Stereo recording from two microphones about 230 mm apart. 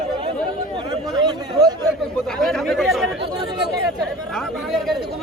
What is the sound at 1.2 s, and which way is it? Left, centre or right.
Speech, centre.